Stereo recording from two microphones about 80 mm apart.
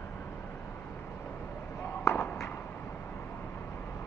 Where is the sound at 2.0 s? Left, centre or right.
Left.